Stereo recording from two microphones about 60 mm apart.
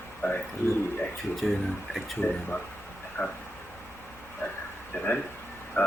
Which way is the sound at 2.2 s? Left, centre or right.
Left.